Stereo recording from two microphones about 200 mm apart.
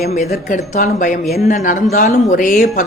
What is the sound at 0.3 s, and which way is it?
A woman's voice, 40° left (ahead or behind).